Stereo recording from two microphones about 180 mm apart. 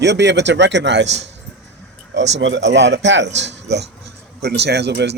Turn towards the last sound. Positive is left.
turn(degrees=-70)  # may be behind; listen again after turning